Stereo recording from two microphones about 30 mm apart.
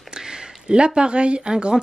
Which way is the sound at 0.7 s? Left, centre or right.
Right.